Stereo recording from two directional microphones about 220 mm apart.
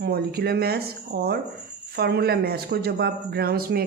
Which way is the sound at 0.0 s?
45° right (ahead or behind).